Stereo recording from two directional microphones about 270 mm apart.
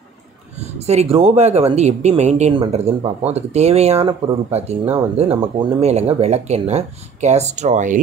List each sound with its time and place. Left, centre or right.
0.6 s speech: right